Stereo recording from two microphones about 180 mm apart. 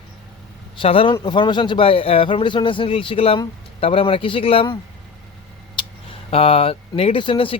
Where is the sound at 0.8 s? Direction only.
30° left (ahead or behind).